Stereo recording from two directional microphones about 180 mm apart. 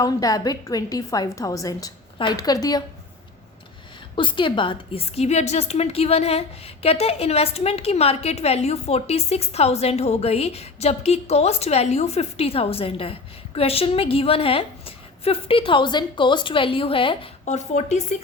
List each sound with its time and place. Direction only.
0.0 s a woman's voice: 20° left (ahead or behind)
4.1 s a woman's voice: 25° left (ahead or behind)
17.4 s a woman's voice: 40° left (ahead or behind)